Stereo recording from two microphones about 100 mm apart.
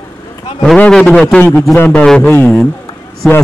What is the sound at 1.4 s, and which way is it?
Speech, 25° left (ahead or behind).